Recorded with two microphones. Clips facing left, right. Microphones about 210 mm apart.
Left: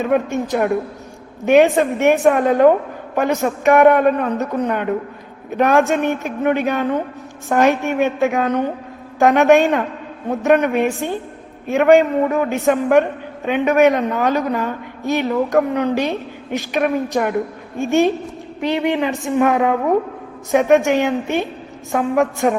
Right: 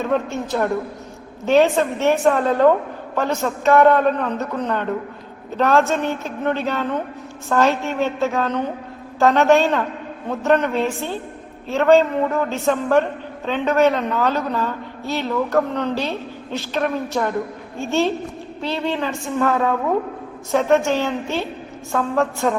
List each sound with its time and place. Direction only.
0.0 s a man's voice: 15° left (ahead or behind)